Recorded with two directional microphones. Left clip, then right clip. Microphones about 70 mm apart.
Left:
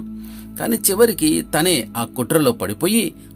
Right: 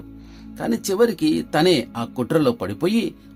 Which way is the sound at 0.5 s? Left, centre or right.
Left.